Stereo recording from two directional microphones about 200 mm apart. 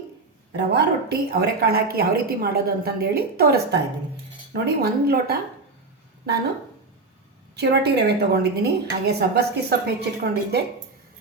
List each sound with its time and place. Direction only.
0.5 s a woman's voice: 55° right (ahead or behind)
7.5 s a woman's voice: 55° right (ahead or behind)